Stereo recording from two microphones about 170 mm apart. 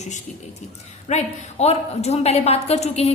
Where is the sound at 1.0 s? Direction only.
40° left (ahead or behind).